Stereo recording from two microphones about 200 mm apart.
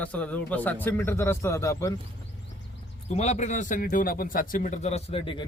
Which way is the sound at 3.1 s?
35° left (ahead or behind).